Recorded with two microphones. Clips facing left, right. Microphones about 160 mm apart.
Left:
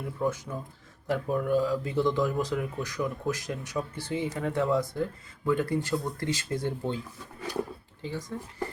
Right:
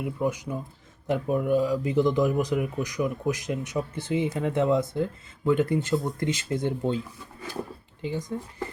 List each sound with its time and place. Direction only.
0.0 s speech: 15° right (ahead or behind)
8.0 s speech: 20° right (ahead or behind)